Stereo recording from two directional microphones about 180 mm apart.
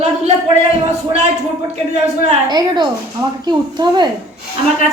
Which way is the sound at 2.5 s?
25° right (ahead or behind).